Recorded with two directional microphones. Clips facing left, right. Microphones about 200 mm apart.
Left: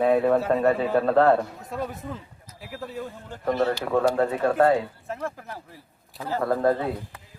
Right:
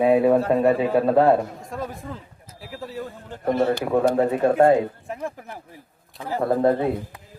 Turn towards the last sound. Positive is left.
turn(degrees=-20)  # may be behind; listen again after turning